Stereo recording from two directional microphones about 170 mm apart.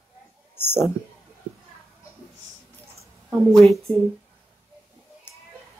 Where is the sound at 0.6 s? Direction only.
15° left (ahead or behind).